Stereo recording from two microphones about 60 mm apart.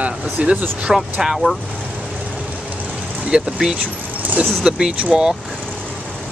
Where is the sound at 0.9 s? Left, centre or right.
Centre.